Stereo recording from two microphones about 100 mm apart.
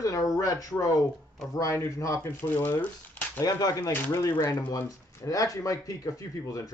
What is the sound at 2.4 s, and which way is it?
Speech, 20° left (ahead or behind).